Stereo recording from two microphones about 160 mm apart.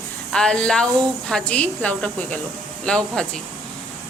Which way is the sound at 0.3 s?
5° left (ahead or behind).